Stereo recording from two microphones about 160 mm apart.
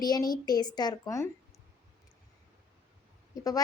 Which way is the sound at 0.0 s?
25° left (ahead or behind).